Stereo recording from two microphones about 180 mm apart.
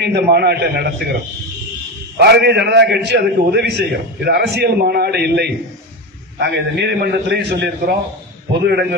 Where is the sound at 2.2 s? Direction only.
65° right (ahead or behind).